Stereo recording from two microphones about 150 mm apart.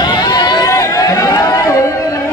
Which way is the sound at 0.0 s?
25° left (ahead or behind).